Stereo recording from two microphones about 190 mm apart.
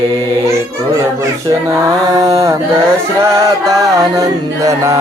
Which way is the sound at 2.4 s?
15° right (ahead or behind).